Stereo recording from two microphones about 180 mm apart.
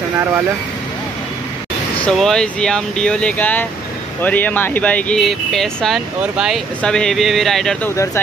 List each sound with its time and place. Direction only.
2.0 s speech: 5° left (ahead or behind)
7.9 s speech: 15° left (ahead or behind)